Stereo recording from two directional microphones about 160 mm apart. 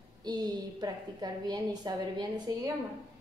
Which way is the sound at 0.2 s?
25° right (ahead or behind).